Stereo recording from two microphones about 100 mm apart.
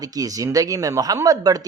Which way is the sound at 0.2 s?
35° right (ahead or behind).